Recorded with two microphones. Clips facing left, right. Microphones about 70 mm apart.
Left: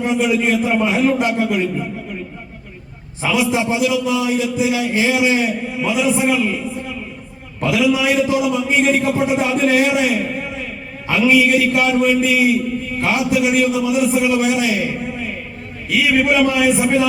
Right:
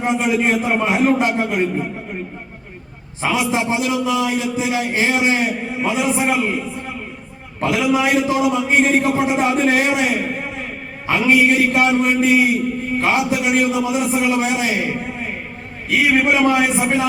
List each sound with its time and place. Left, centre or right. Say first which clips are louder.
0.2 s a man's voice: left 1 dB; right
3.2 s a man's voice: left 1 dB; right
7.6 s a man's voice: left 1 dB; right